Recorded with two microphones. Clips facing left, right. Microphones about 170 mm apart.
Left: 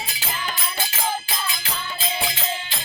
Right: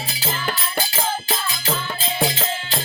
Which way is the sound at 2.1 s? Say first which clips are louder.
Right 7 dB; 40° right (ahead or behind).